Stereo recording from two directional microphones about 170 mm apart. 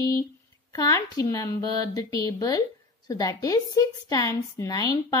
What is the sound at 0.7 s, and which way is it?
A woman's voice, 20° left (ahead or behind).